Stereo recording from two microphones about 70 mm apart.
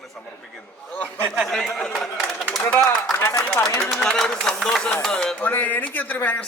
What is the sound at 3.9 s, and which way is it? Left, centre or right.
Speech, centre.